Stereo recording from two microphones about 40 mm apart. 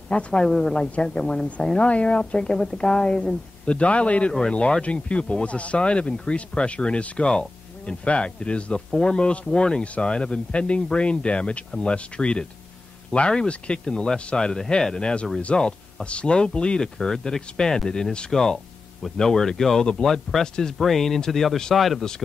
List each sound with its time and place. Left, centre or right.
0.1 s speech: left
1.8 s a man's voice: left
4.3 s speech: centre